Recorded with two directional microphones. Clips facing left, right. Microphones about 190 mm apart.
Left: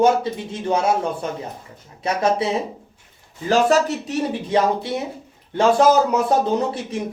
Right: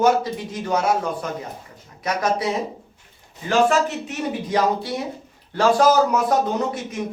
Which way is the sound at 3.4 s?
35° left (ahead or behind).